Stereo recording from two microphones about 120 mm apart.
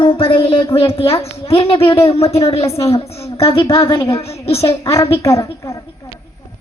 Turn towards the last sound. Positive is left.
turn(degrees=25)  # may be behind; listen again after turning